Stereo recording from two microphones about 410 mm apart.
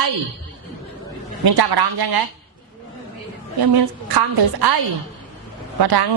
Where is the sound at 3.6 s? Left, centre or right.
Right.